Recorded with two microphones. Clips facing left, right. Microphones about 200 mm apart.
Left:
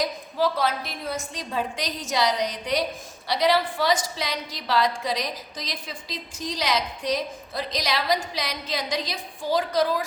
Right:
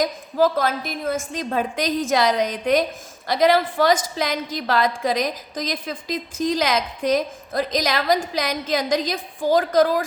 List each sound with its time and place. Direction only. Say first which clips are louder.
0.0 s a woman's voice: right 5 dB; 45° right (ahead or behind)